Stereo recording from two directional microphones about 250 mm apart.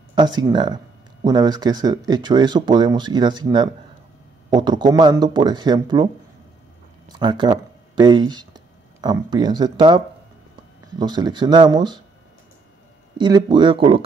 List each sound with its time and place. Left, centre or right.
0.1 s speech: centre
7.1 s speech: centre
13.2 s speech: centre